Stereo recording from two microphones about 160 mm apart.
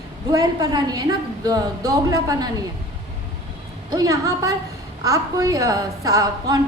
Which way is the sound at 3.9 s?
20° right (ahead or behind).